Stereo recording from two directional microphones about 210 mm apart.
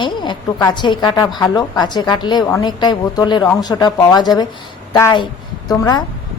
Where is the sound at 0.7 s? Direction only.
20° left (ahead or behind).